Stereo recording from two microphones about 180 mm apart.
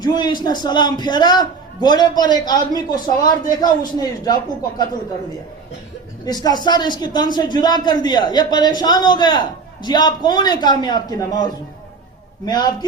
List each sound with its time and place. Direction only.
0.0 s speech: 20° left (ahead or behind)
6.2 s speech: 20° left (ahead or behind)